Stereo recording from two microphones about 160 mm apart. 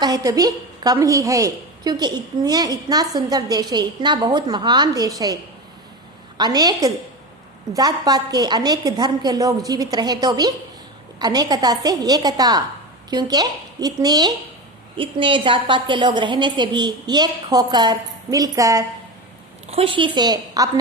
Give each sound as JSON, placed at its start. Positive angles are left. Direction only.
{"t": 0.0, "sound": "a woman's voice", "side_deg": -20}
{"t": 19.7, "sound": "a woman's voice", "side_deg": -35}